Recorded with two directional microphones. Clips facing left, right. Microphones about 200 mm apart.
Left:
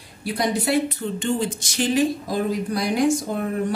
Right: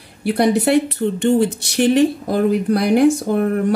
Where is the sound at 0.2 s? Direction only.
60° right (ahead or behind).